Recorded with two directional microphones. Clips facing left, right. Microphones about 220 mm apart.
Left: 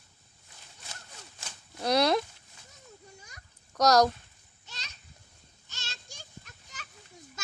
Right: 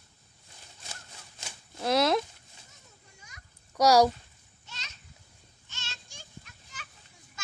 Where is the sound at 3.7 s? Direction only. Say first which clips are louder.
Right 1 dB; 10° right (ahead or behind).